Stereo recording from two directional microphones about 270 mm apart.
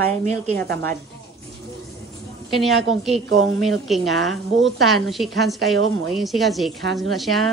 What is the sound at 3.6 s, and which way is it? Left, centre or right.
A woman's voice, centre.